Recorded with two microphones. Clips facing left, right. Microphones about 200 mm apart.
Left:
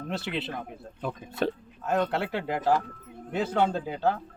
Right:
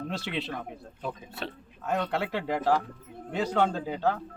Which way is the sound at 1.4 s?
45° left (ahead or behind).